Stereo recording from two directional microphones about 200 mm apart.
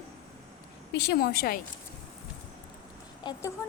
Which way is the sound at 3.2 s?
15° left (ahead or behind).